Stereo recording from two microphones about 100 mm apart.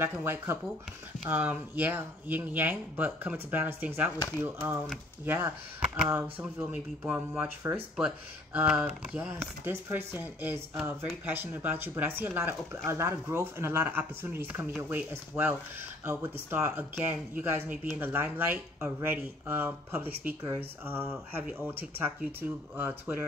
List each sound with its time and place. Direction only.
0.0 s speech: 25° right (ahead or behind)
6.7 s speech: 15° right (ahead or behind)
8.5 s speech: 10° right (ahead or behind)
9.3 s speech: 20° right (ahead or behind)